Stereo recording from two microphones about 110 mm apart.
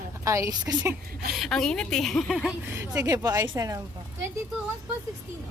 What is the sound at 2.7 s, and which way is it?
Speech, 30° right (ahead or behind).